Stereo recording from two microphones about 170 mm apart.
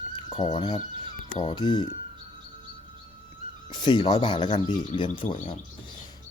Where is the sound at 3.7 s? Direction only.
25° left (ahead or behind).